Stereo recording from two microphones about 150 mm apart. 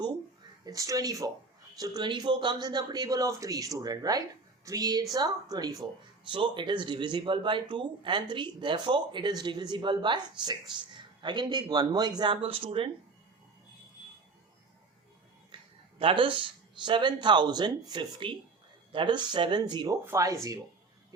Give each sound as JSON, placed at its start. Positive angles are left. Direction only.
{"t": 0.6, "sound": "speech", "side_deg": -25}
{"t": 15.5, "sound": "a sound", "side_deg": -30}
{"t": 16.0, "sound": "speech", "side_deg": -35}